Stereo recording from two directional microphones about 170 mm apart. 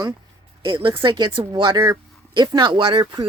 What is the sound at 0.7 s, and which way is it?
Speech, 30° right (ahead or behind).